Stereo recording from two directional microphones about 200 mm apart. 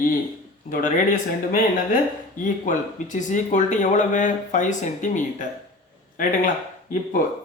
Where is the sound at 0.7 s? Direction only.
40° left (ahead or behind).